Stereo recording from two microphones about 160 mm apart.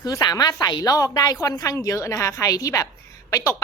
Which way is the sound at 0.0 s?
20° left (ahead or behind).